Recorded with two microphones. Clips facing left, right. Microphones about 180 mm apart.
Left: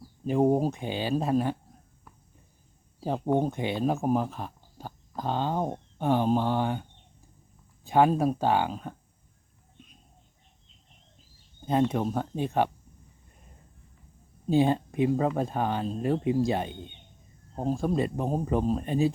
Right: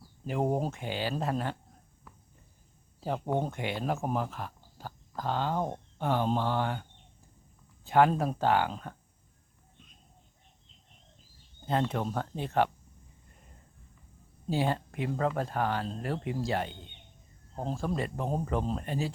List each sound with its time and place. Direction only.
0.3 s speech: 15° left (ahead or behind)
3.0 s speech: 20° left (ahead or behind)
7.9 s speech: 15° left (ahead or behind)
11.6 s speech: 15° left (ahead or behind)
14.5 s speech: 20° left (ahead or behind)